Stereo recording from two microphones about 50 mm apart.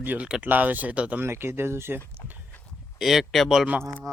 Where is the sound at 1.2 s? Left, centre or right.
Right.